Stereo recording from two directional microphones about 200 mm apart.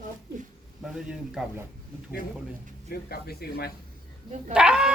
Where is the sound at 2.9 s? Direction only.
50° left (ahead or behind).